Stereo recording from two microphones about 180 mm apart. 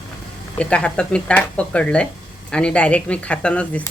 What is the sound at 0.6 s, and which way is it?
Speech, 5° left (ahead or behind).